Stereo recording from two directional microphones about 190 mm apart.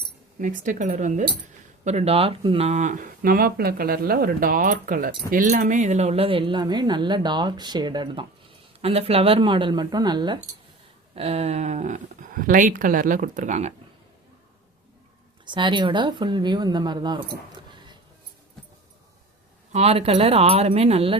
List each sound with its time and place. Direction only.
0.3 s speech: 40° right (ahead or behind)
15.4 s speech: 25° right (ahead or behind)
19.7 s speech: 35° right (ahead or behind)